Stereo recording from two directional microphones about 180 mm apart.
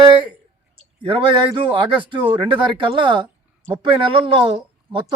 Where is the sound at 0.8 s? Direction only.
30° right (ahead or behind).